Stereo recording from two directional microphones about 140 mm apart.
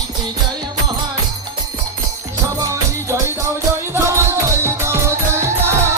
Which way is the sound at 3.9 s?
20° right (ahead or behind).